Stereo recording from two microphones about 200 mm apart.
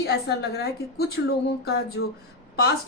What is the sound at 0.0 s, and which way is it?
A woman's voice, 55° left (ahead or behind).